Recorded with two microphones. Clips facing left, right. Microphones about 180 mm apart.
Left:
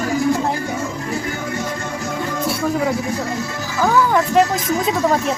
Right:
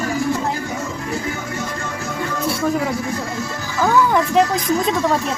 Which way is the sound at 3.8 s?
Centre (ahead or behind).